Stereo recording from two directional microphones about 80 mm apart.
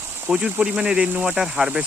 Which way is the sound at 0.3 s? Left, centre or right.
Centre.